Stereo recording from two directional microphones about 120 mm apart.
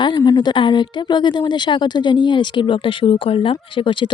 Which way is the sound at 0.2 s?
35° left (ahead or behind).